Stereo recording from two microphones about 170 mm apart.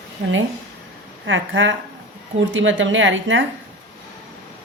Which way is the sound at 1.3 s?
90° right.